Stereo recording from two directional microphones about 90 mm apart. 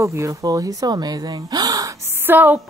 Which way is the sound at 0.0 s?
35° right (ahead or behind).